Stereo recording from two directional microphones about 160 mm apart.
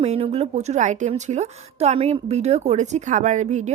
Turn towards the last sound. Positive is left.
turn(degrees=-45)  # may be behind; listen again after turning